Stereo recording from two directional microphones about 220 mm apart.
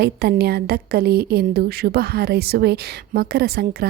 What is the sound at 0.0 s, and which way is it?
A woman's voice, 45° right (ahead or behind).